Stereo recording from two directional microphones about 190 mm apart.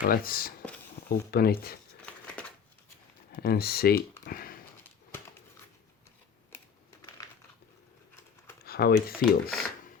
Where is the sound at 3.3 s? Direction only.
55° left (ahead or behind).